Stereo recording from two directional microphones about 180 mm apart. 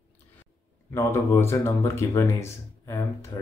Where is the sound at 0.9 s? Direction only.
15° left (ahead or behind).